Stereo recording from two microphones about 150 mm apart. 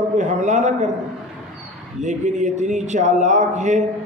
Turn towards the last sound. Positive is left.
turn(degrees=-55)  # may be behind; listen again after turning